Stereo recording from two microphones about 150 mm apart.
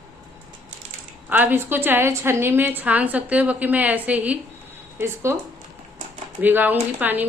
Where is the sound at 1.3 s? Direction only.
10° right (ahead or behind).